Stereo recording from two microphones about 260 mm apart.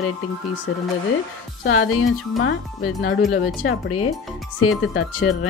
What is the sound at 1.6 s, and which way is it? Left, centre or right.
Speech, left.